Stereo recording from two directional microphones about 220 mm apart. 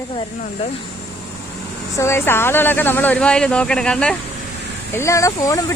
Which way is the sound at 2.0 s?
10° left (ahead or behind).